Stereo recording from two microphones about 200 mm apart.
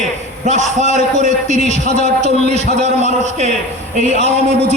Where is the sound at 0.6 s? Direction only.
35° left (ahead or behind).